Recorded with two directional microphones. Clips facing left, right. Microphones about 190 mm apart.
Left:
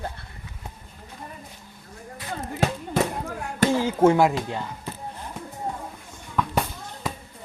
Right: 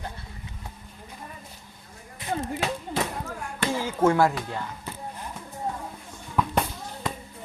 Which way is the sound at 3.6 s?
45° left (ahead or behind).